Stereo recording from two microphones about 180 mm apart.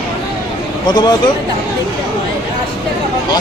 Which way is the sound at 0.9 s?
25° left (ahead or behind).